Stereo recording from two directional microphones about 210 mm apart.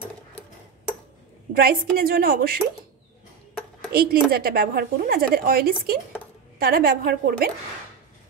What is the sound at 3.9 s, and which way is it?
A woman's voice, 45° right (ahead or behind).